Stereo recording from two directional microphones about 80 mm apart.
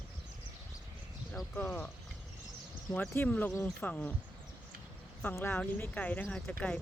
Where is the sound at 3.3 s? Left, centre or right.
Centre.